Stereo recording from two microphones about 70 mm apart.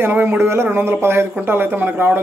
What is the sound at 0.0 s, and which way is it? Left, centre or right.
A man's voice, right.